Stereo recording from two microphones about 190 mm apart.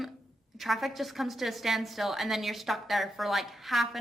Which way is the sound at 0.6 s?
Centre (ahead or behind).